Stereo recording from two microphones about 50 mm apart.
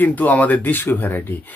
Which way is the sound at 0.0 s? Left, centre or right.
Left.